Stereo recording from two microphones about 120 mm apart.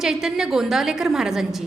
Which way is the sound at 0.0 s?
5° right (ahead or behind).